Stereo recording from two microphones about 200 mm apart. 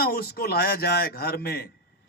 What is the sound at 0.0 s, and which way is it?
A man's voice, 50° left (ahead or behind).